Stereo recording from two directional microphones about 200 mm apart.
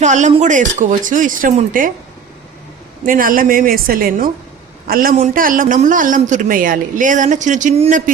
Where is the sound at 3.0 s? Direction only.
45° right (ahead or behind).